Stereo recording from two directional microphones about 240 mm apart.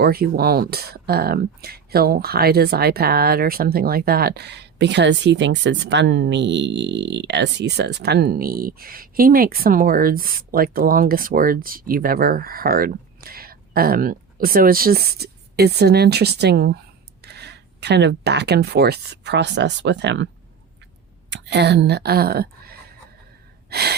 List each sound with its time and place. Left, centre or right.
0.0 s speech: right
23.6 s gasp: right